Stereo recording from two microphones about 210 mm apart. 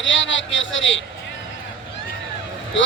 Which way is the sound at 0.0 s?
65° left (ahead or behind).